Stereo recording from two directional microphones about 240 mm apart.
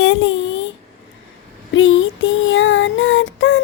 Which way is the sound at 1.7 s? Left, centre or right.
Left.